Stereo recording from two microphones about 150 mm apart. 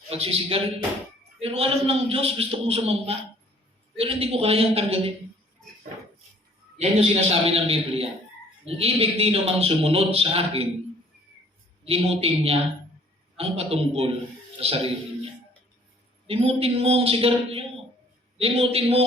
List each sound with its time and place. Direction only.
0.1 s a man's voice: 40° right (ahead or behind)
6.7 s a man's voice: 45° right (ahead or behind)
11.9 s a man's voice: 40° right (ahead or behind)